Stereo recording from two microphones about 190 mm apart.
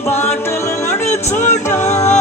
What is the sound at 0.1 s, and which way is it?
Music, 10° left (ahead or behind).